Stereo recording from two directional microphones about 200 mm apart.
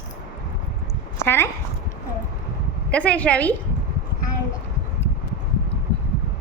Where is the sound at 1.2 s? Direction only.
10° left (ahead or behind).